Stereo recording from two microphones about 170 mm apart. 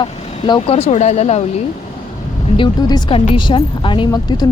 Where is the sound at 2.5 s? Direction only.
25° left (ahead or behind).